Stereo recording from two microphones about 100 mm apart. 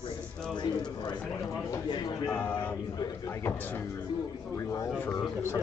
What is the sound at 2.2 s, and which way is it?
Speech, 20° left (ahead or behind).